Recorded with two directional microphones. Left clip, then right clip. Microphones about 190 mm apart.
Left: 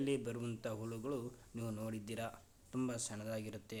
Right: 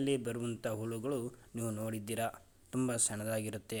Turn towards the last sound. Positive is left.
turn(degrees=-25)  # may be behind; listen again after turning